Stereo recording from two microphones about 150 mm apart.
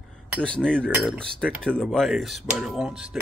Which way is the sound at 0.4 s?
5° left (ahead or behind).